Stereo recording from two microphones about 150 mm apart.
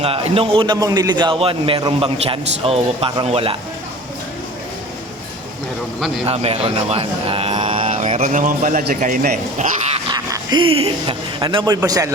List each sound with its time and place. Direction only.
0.0 s a man's voice: 40° right (ahead or behind)
6.2 s speech: 40° right (ahead or behind)
7.9 s speech: 50° right (ahead or behind)
10.1 s speech: 25° right (ahead or behind)